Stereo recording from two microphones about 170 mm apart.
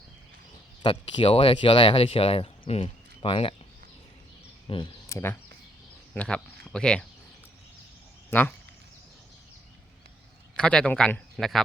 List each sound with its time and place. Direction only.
0.8 s speech: 30° left (ahead or behind)
4.7 s speech: 30° left (ahead or behind)
5.0 s a man's voice: 15° left (ahead or behind)
8.3 s speech: 10° left (ahead or behind)
10.6 s a man's voice: 5° left (ahead or behind)